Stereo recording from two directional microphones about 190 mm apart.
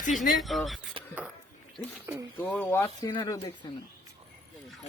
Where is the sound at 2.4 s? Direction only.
10° left (ahead or behind).